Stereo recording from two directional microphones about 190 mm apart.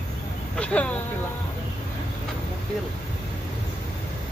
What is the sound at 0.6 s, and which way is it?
Speech, 5° left (ahead or behind).